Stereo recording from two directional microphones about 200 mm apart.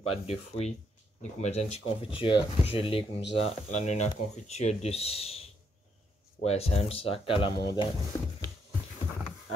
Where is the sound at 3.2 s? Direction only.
60° left (ahead or behind).